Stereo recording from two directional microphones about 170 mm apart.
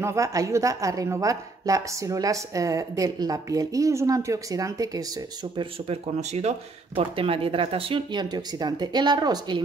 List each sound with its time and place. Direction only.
0.0 s a woman's voice: 20° right (ahead or behind)